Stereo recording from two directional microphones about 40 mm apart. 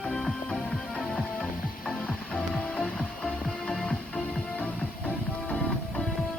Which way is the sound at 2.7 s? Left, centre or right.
Centre.